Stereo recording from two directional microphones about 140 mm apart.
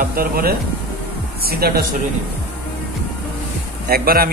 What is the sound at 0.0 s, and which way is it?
A man's voice, 90° right.